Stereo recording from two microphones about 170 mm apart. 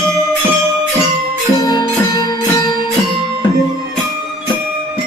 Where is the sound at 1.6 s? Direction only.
25° left (ahead or behind).